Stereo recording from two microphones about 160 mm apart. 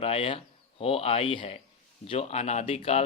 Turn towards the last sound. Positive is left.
turn(degrees=40)  # may be behind; listen again after turning